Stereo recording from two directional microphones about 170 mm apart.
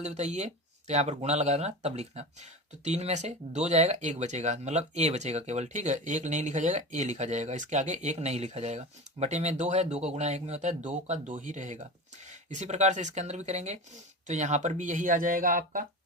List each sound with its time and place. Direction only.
0.0 s speech: 40° right (ahead or behind)